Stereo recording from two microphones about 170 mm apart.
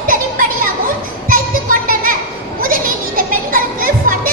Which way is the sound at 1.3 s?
55° right (ahead or behind).